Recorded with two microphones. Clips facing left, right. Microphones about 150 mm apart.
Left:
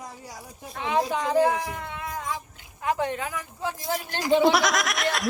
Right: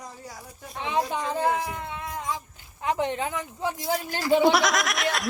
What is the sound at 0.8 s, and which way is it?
Speech, 25° right (ahead or behind).